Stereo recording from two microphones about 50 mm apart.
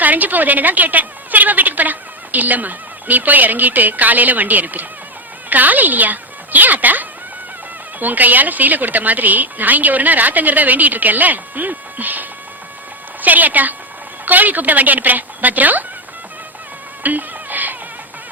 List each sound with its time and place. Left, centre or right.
0.0 s a woman's voice: right
13.2 s a woman's voice: right
17.0 s a sound: right